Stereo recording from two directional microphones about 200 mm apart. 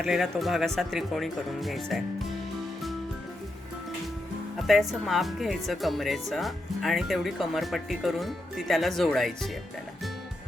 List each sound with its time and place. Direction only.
0.0 s speech: centre (ahead or behind)
4.6 s speech: centre (ahead or behind)